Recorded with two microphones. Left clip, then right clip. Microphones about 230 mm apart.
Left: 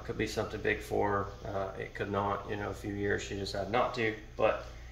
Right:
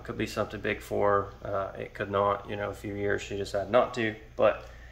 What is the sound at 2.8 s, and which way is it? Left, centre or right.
Speech, centre.